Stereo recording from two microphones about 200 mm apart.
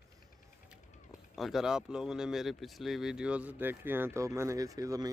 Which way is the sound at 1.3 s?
Centre (ahead or behind).